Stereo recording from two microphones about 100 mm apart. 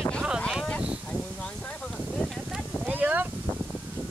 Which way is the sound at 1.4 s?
5° left (ahead or behind).